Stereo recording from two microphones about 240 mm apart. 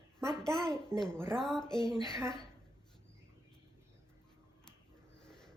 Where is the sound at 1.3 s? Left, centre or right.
Centre.